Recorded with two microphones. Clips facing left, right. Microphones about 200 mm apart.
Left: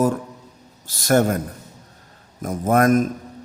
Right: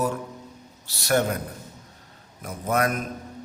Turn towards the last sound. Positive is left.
turn(degrees=45)  # may be behind; listen again after turning